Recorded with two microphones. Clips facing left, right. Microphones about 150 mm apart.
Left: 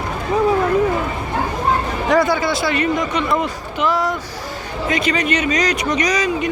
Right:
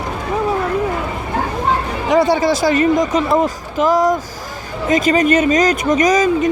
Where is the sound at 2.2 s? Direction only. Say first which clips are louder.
Right 4 dB; 35° right (ahead or behind).